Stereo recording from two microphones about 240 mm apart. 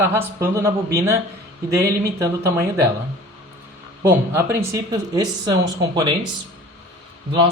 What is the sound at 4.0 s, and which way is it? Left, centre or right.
Speech, centre.